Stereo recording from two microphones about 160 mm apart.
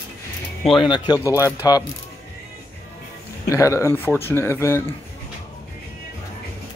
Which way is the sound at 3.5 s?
20° left (ahead or behind).